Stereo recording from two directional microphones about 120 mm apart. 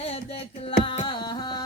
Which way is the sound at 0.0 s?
55° left (ahead or behind).